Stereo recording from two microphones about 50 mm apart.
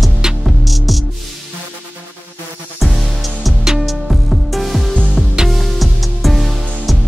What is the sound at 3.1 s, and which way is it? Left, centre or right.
Music, centre.